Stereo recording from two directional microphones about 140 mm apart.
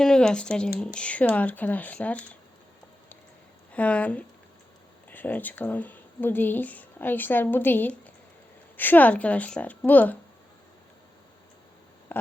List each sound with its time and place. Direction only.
0.0 s speech: 5° left (ahead or behind)
3.7 s speech: 10° left (ahead or behind)